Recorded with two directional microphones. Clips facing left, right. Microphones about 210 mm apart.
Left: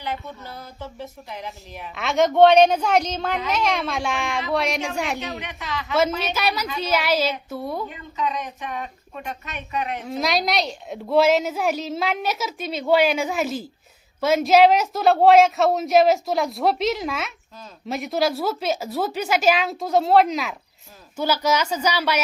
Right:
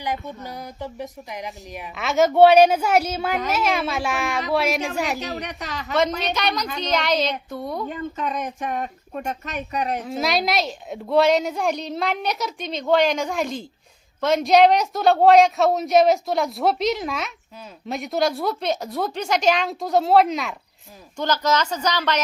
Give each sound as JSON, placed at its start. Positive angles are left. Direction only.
{"t": 0.0, "sound": "a woman's voice", "side_deg": -15}
{"t": 2.0, "sound": "a woman's voice", "side_deg": -5}
{"t": 5.4, "sound": "speech", "side_deg": -40}
{"t": 6.1, "sound": "a woman's voice", "side_deg": 5}
{"t": 7.9, "sound": "speech", "side_deg": -50}
{"t": 10.0, "sound": "a woman's voice", "side_deg": 0}